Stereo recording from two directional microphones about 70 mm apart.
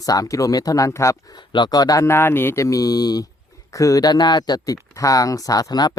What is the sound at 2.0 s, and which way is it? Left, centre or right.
Speech, left.